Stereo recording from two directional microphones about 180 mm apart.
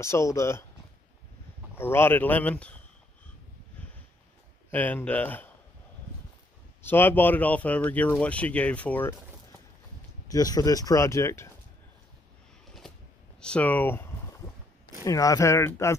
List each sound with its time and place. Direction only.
0.0 s speech: 15° left (ahead or behind)
1.8 s speech: 10° left (ahead or behind)
4.6 s speech: 10° left (ahead or behind)
6.8 s speech: 10° left (ahead or behind)
10.3 s speech: 20° left (ahead or behind)
13.4 s speech: 5° left (ahead or behind)
15.0 s speech: 20° left (ahead or behind)